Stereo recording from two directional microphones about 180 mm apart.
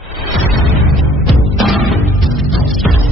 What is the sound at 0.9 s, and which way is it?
Music, centre (ahead or behind).